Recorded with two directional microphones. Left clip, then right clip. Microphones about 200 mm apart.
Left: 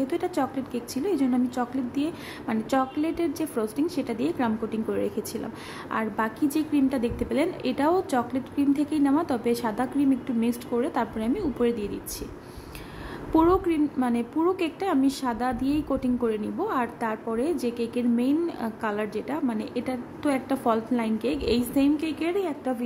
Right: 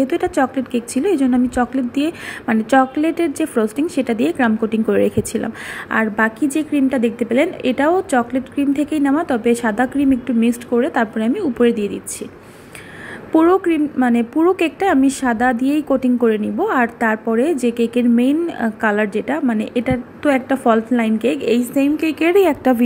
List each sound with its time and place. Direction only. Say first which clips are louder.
0.0 s a woman's voice: right 10 dB; 20° right (ahead or behind)
13.3 s a woman's voice: right 8 dB; 15° right (ahead or behind); by 22.8 s 35° right (ahead or behind)